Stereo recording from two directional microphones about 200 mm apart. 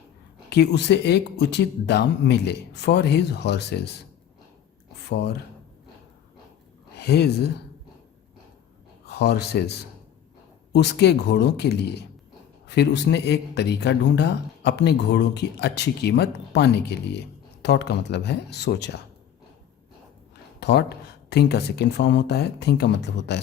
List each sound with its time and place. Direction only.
0.5 s speech: 55° left (ahead or behind)
5.0 s speech: 55° left (ahead or behind)
7.0 s speech: 55° left (ahead or behind)
9.0 s speech: 55° left (ahead or behind)
20.6 s speech: 55° left (ahead or behind)